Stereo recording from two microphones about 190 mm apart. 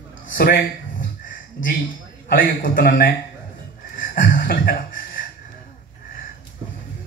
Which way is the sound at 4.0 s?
50° left (ahead or behind).